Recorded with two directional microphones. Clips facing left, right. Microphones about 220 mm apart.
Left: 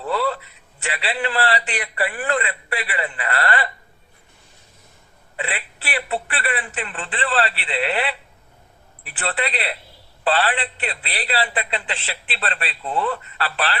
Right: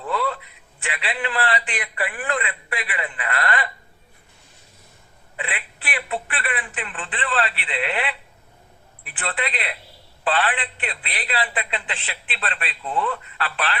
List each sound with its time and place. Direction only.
0.0 s a sound: 35° left (ahead or behind)
0.8 s a man's voice: 35° left (ahead or behind)
5.4 s a man's voice: 35° left (ahead or behind)